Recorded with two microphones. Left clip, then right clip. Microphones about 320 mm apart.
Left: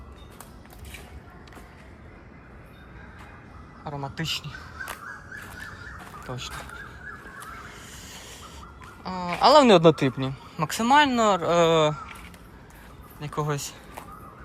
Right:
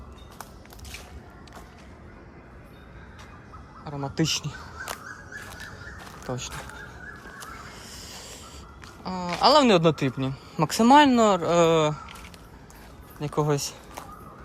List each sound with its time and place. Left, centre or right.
3.8 s speech: centre
6.2 s speech: centre
7.5 s snake: centre
9.0 s speech: centre
13.1 s speech: centre